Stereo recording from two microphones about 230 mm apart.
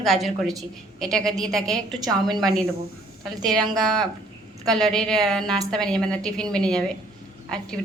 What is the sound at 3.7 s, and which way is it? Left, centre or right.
A woman's voice, centre.